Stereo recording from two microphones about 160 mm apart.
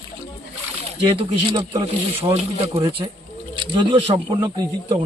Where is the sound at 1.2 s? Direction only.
30° right (ahead or behind).